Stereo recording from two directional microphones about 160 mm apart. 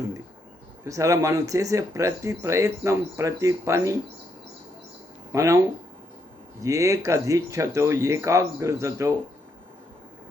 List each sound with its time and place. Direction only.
0.9 s speech: 20° right (ahead or behind)
5.3 s speech: 20° right (ahead or behind)